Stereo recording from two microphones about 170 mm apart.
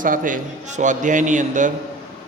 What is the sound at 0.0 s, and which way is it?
A man's voice, 50° right (ahead or behind).